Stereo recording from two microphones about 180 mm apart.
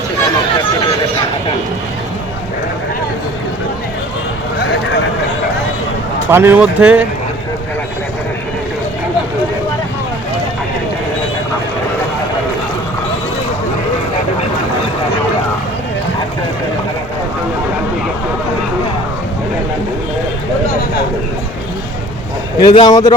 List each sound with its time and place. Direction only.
6.3 s speech: 10° right (ahead or behind)
22.6 s a man's voice: 25° left (ahead or behind)